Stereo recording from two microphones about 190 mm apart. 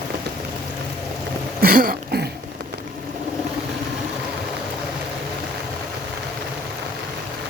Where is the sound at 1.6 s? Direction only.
50° right (ahead or behind).